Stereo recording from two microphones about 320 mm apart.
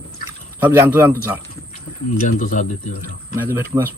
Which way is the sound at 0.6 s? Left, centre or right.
Centre.